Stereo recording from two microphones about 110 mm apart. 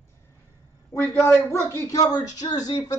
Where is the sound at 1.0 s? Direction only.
25° left (ahead or behind).